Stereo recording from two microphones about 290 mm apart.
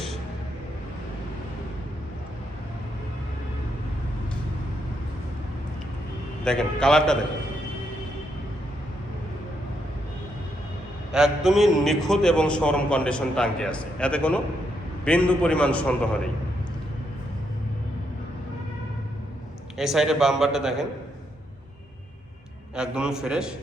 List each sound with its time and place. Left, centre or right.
6.4 s a man's voice: centre
11.1 s a man's voice: centre
19.7 s a man's voice: centre
22.7 s a man's voice: centre